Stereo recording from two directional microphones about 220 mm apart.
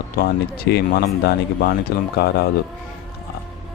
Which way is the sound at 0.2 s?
40° left (ahead or behind).